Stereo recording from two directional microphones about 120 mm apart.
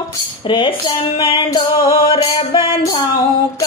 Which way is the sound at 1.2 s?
50° left (ahead or behind).